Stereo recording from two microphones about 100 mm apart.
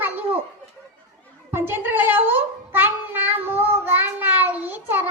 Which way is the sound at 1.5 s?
25° right (ahead or behind).